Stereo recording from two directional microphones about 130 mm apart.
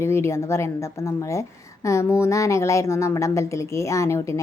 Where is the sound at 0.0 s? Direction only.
20° left (ahead or behind).